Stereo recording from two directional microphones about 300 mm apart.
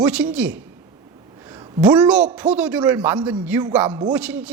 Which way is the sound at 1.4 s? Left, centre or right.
Centre.